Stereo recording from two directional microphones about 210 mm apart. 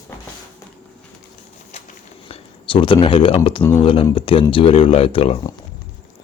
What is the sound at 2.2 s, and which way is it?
Speech, 25° left (ahead or behind).